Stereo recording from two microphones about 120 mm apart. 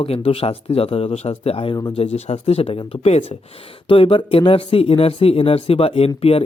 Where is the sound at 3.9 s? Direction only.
50° left (ahead or behind).